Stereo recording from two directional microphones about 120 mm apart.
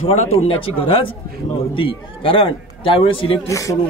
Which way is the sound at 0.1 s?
60° left (ahead or behind).